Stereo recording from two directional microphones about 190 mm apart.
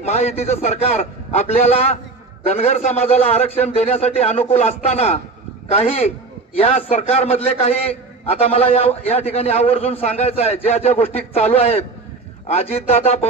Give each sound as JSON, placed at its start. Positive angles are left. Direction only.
{"t": 0.0, "sound": "a man's voice", "side_deg": 35}